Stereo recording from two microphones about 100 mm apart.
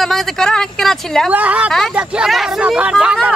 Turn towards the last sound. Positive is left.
turn(degrees=-10)  # may be behind; listen again after turning